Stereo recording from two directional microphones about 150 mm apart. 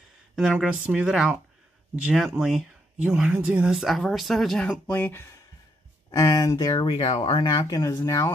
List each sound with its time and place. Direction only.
0.4 s speech: 5° right (ahead or behind); by 8.3 s 20° left (ahead or behind)